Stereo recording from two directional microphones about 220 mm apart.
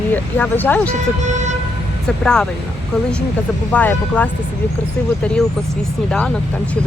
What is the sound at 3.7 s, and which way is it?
Speech, 5° left (ahead or behind).